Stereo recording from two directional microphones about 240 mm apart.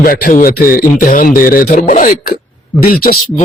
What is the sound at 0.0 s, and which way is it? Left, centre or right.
A man's voice, left.